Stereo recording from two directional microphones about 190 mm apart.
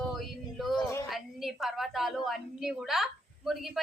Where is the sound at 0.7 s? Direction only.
15° left (ahead or behind).